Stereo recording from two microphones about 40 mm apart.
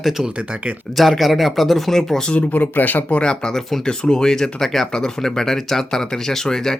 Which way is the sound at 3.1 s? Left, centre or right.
Left.